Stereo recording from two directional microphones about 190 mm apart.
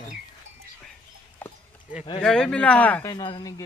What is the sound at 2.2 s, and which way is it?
Speech, 5° left (ahead or behind).